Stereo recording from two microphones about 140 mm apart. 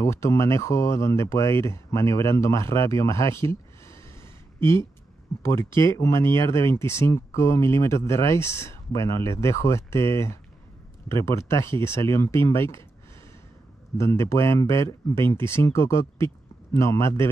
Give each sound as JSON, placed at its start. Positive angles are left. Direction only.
{"t": 0.0, "sound": "speech", "side_deg": 20}
{"t": 4.6, "sound": "speech", "side_deg": 20}
{"t": 13.9, "sound": "speech", "side_deg": 20}